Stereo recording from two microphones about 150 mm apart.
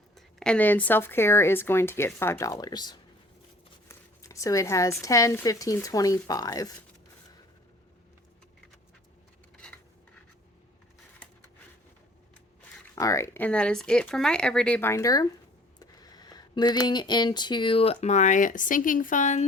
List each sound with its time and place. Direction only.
0.3 s speech: 5° left (ahead or behind); by 6.7 s 25° left (ahead or behind)
13.0 s speech: 20° left (ahead or behind); by 19.5 s 55° left (ahead or behind)